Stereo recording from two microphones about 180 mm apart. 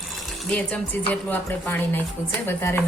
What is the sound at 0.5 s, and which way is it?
Speech, 5° left (ahead or behind).